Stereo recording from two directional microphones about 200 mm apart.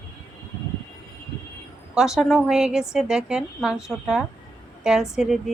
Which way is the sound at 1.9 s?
5° right (ahead or behind).